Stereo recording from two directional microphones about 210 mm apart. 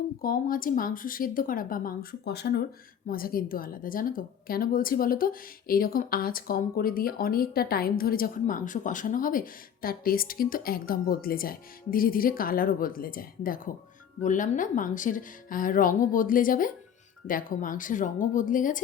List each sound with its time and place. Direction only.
0.2 s a woman's voice: 40° left (ahead or behind)